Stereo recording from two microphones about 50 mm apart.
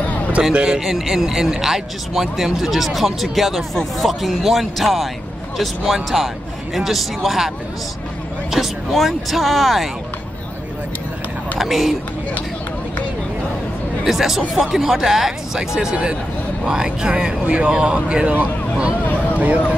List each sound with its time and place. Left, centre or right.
0.4 s speech: centre
11.5 s speech: centre
14.0 s speech: centre; by 18.3 s right
18.3 s speech: right
19.0 s a sound: left